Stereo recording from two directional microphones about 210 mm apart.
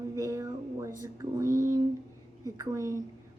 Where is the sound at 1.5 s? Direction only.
40° right (ahead or behind).